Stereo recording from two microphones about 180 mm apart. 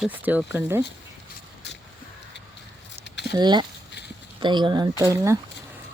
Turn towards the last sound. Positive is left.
turn(degrees=-20)  # may be behind; listen again after turning